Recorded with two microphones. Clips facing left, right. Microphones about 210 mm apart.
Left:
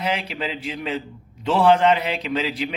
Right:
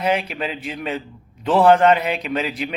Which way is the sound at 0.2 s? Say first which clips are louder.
Right 2 dB; 25° left (ahead or behind).